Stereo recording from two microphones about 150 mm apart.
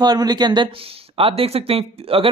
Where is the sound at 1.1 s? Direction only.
40° right (ahead or behind).